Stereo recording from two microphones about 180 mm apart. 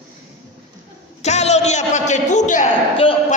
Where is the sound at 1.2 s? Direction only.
40° left (ahead or behind).